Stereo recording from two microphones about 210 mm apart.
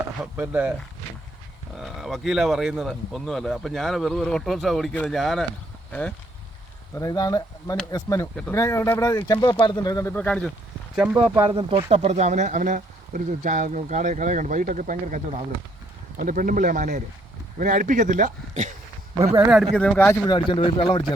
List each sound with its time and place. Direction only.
0.3 s speech: 5° right (ahead or behind)
1.7 s speech: centre (ahead or behind)
10.9 s speech: 5° right (ahead or behind)
11.4 s speech: 25° right (ahead or behind)
19.7 s speech: 5° left (ahead or behind)
20.2 s speech: 20° left (ahead or behind)